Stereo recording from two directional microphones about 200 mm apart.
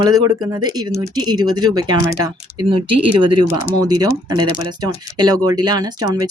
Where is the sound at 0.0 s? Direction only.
20° right (ahead or behind).